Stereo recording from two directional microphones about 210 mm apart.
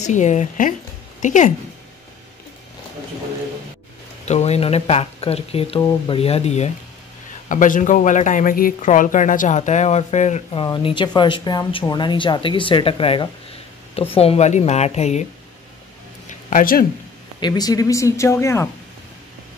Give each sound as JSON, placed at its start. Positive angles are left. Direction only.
{"t": 0.0, "sound": "speech", "side_deg": 35}
{"t": 4.3, "sound": "speech", "side_deg": 30}
{"t": 16.3, "sound": "a sound", "side_deg": 35}
{"t": 17.4, "sound": "speech", "side_deg": 20}